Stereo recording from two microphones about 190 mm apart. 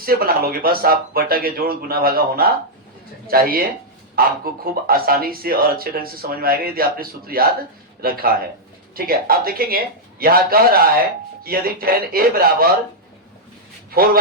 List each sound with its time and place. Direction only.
0.0 s speech: 50° right (ahead or behind)
13.9 s speech: 50° right (ahead or behind)